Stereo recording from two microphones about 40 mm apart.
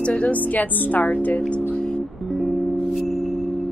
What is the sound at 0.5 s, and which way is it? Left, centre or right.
Speech, left.